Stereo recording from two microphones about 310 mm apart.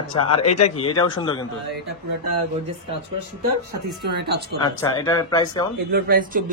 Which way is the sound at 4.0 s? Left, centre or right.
Right.